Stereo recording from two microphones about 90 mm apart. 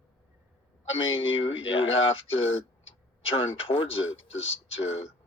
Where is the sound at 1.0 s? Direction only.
75° left (ahead or behind).